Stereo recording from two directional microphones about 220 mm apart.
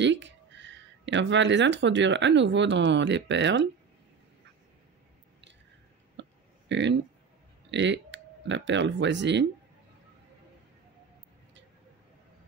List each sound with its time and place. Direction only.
0.0 s speech: 55° right (ahead or behind)
6.2 s a sound: 55° right (ahead or behind)
6.7 s speech: 55° right (ahead or behind)